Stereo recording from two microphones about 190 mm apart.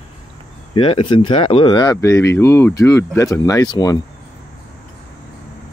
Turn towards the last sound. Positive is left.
turn(degrees=20)  # may be behind; listen again after turning